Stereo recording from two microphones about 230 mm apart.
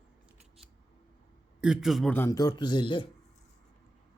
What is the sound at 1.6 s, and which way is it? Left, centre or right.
A man's voice, centre.